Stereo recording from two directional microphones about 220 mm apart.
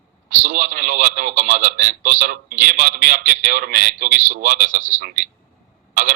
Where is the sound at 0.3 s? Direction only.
35° right (ahead or behind).